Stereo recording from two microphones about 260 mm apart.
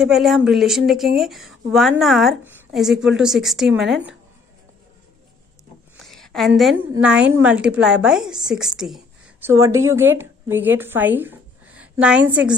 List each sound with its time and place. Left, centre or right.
0.0 s a woman's voice: centre
5.9 s a sound: centre
6.9 s a woman's voice: centre